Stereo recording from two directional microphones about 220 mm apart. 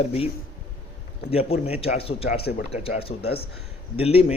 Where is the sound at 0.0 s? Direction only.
30° left (ahead or behind).